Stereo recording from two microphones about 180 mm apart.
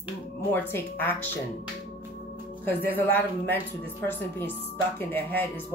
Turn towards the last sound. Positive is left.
turn(degrees=10)  # may be behind; listen again after turning